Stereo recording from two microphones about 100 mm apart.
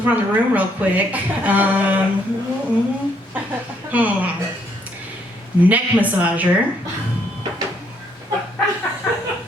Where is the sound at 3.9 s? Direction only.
15° right (ahead or behind).